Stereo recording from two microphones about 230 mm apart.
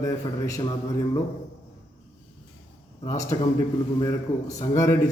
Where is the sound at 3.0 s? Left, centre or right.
Centre.